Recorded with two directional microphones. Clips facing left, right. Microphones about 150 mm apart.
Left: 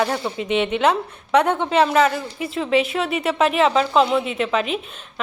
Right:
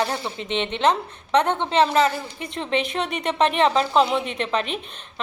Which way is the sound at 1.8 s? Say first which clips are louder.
Left 1 dB; 30° right (ahead or behind).